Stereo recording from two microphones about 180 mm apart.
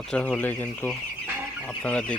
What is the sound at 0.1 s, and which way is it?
Speech, 5° left (ahead or behind).